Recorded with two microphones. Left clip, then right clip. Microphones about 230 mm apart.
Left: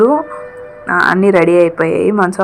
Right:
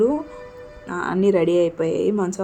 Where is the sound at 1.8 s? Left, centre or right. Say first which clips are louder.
Left 8 dB; left.